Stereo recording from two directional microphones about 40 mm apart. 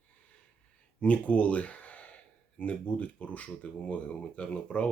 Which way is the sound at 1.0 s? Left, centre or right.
Left.